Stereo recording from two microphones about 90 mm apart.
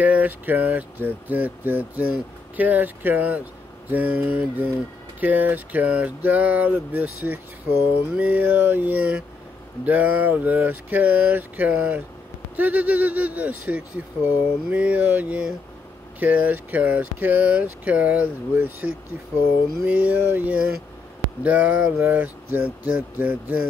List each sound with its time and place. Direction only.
0.0 s speech: 20° right (ahead or behind)